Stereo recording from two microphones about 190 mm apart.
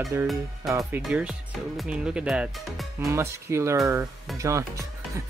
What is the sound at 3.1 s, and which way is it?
Speech, 15° right (ahead or behind).